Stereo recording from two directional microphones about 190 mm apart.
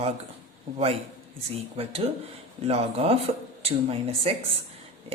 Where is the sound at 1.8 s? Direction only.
30° right (ahead or behind).